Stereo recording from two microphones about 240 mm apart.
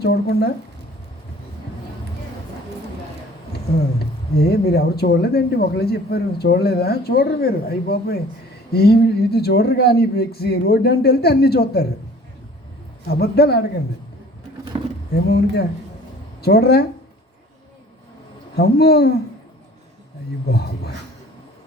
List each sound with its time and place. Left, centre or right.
0.0 s speech: left
3.5 s speech: left
13.1 s speech: left
14.7 s a sound: right
15.1 s speech: left
18.5 s speech: left
20.5 s speech: left